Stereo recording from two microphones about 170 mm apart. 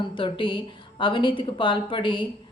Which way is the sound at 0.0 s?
30° left (ahead or behind).